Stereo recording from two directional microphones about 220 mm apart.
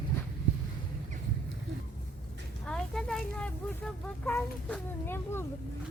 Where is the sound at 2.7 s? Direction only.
5° left (ahead or behind).